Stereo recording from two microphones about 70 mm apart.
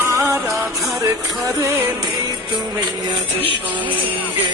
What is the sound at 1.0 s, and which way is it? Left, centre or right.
Music, right.